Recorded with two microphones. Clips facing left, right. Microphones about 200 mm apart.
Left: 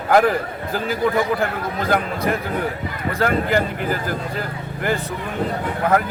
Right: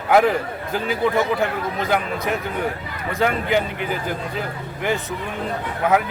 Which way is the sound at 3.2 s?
Centre (ahead or behind).